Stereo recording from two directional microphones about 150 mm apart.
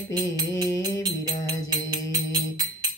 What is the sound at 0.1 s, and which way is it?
Music, 25° right (ahead or behind).